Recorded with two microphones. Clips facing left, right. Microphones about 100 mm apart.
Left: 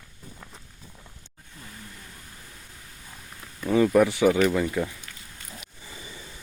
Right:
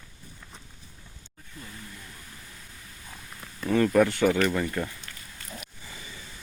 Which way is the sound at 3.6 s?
10° left (ahead or behind).